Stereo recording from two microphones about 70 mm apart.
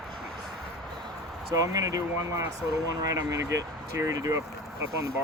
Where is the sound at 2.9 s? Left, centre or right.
Right.